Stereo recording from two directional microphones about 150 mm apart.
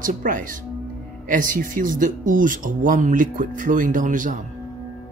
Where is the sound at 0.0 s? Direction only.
60° right (ahead or behind).